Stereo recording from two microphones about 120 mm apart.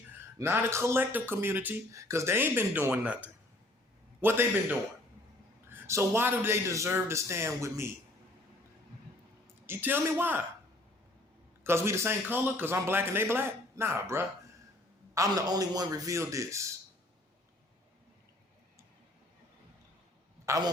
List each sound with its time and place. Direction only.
0.3 s speech: 20° right (ahead or behind)
9.6 s a man's voice: 15° right (ahead or behind)
11.6 s speech: 20° right (ahead or behind)
20.4 s a man's voice: 25° right (ahead or behind)